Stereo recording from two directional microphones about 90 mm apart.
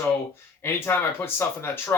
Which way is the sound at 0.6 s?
25° left (ahead or behind).